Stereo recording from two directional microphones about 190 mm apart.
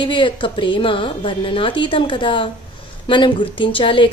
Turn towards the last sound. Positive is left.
turn(degrees=25)  # may be behind; listen again after turning